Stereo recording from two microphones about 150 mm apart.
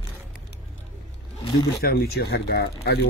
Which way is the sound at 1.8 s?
90° left.